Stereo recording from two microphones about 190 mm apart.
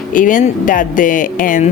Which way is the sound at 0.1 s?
45° left (ahead or behind).